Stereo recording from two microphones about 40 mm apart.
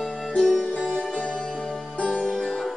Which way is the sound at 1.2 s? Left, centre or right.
Left.